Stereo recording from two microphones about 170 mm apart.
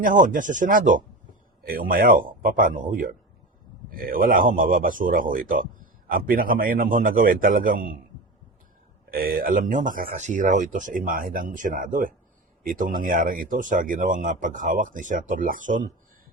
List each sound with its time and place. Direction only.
0.0 s speech: 50° right (ahead or behind)
9.0 s speech: 60° right (ahead or behind)